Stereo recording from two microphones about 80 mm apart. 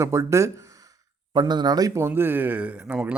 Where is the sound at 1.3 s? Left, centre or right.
Right.